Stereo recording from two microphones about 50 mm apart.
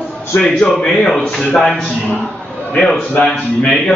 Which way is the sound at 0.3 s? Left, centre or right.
Left.